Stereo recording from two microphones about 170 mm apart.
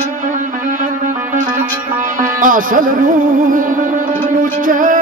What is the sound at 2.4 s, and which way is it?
Music, 50° right (ahead or behind).